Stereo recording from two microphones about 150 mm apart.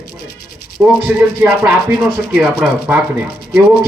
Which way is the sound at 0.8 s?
10° right (ahead or behind).